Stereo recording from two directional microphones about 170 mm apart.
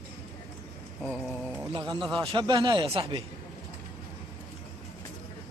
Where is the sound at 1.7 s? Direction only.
25° right (ahead or behind).